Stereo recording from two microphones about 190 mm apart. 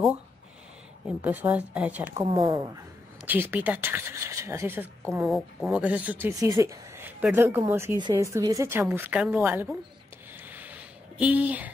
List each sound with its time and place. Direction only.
1.0 s speech: 10° right (ahead or behind)
2.2 s speech: 20° right (ahead or behind)
5.2 s speech: centre (ahead or behind)
10.4 s a sound: 10° right (ahead or behind)